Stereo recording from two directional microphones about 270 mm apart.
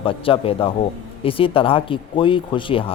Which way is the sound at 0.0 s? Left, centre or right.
Centre.